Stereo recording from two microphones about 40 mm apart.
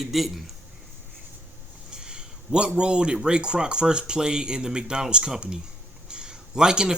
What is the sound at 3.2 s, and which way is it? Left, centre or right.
Speech, right.